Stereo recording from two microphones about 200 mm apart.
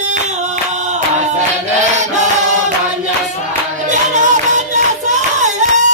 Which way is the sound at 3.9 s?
40° right (ahead or behind).